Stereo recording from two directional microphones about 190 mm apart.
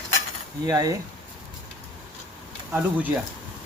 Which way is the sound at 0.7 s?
20° right (ahead or behind).